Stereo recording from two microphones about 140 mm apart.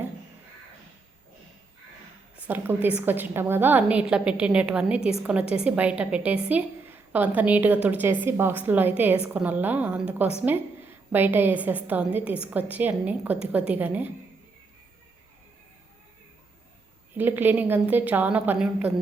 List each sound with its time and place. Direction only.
2.5 s a woman's voice: 10° right (ahead or behind)
4.9 s a woman's voice: 45° left (ahead or behind)
5.2 s a woman's voice: 10° right (ahead or behind)
17.2 s a woman's voice: 15° right (ahead or behind)